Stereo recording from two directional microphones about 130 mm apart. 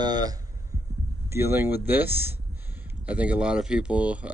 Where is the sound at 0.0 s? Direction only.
30° right (ahead or behind).